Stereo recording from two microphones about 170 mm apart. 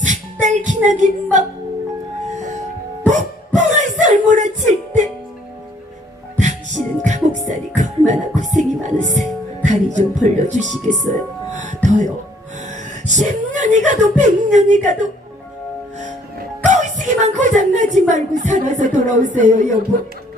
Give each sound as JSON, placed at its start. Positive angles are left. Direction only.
{"t": 0.0, "sound": "music", "side_deg": -45}
{"t": 3.1, "sound": "a sound", "side_deg": -45}
{"t": 6.4, "sound": "music", "side_deg": -45}
{"t": 9.6, "sound": "speech", "side_deg": -45}
{"t": 11.5, "sound": "music", "side_deg": -45}
{"t": 13.1, "sound": "speech", "side_deg": -45}
{"t": 16.6, "sound": "a sound", "side_deg": -45}
{"t": 18.1, "sound": "speech", "side_deg": -45}